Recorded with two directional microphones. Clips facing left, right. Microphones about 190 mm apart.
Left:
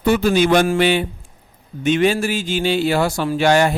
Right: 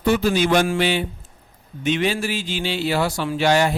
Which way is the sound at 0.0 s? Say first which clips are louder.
Left 3 dB; 55° left (ahead or behind).